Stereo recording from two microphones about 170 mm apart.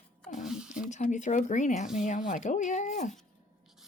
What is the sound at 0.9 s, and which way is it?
Speech, 45° left (ahead or behind).